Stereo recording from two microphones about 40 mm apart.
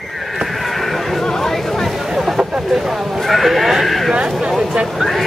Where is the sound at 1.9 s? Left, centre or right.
Centre.